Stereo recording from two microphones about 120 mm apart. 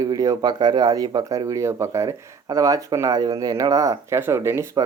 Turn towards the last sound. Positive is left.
turn(degrees=-20)  # may be behind; listen again after turning